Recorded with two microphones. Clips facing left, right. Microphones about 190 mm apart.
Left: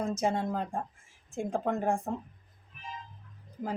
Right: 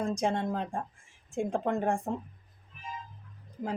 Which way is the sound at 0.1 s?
5° left (ahead or behind).